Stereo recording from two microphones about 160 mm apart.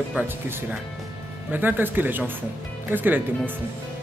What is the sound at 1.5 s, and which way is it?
A man's voice, 10° right (ahead or behind).